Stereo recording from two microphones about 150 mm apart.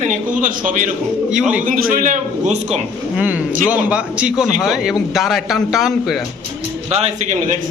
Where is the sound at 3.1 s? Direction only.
10° right (ahead or behind).